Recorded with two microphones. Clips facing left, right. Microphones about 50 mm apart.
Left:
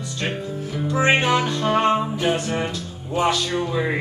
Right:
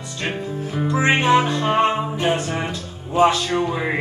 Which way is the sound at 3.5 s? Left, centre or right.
Right.